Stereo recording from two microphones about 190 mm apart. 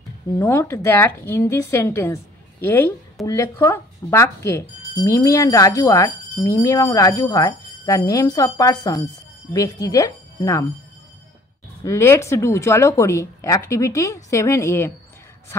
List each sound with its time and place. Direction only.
0.4 s speech: 15° left (ahead or behind)
11.8 s speech: 15° left (ahead or behind)